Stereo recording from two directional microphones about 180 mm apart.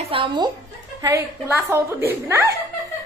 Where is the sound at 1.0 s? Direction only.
15° right (ahead or behind).